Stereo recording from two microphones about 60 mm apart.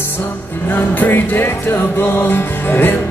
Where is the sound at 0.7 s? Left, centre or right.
Left.